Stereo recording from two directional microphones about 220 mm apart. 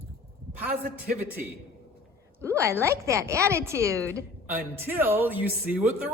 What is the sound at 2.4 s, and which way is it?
A woman's voice, 10° right (ahead or behind).